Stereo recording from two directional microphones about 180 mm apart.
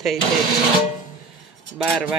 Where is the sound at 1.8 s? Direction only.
Centre (ahead or behind).